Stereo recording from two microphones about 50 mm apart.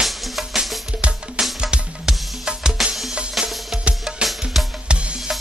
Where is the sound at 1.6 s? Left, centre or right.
Centre.